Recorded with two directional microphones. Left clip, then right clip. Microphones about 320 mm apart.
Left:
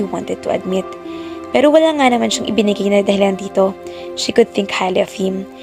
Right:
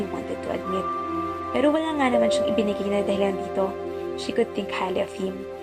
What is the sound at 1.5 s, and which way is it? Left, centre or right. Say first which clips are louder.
A woman's voice: left 12 dB; left.